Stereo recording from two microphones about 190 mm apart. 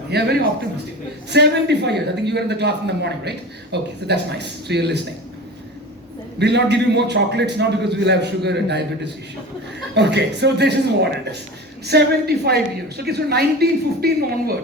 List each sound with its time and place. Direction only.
0.1 s a man's voice: 60° right (ahead or behind)
6.4 s a man's voice: 65° right (ahead or behind)
9.9 s a man's voice: 65° right (ahead or behind)